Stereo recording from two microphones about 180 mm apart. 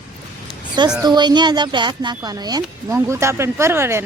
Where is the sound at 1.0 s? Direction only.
25° right (ahead or behind).